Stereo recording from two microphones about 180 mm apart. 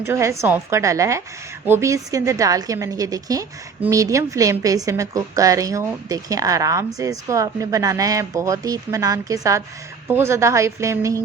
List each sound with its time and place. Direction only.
0.0 s a woman's voice: 15° right (ahead or behind)